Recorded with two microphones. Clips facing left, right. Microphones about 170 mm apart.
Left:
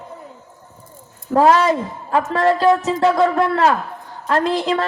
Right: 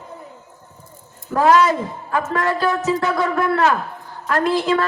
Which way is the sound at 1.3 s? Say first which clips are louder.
Left 1 dB; 30° left (ahead or behind).